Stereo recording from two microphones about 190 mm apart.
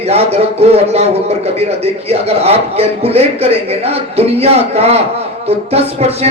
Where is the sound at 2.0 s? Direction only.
35° right (ahead or behind).